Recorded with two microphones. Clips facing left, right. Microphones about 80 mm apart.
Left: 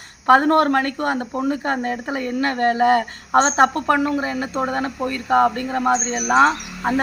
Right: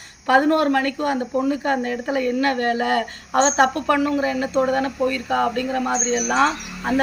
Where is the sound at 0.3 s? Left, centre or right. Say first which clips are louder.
Left 2 dB; left.